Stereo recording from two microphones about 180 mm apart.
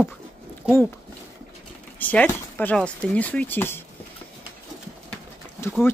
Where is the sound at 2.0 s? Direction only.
10° left (ahead or behind).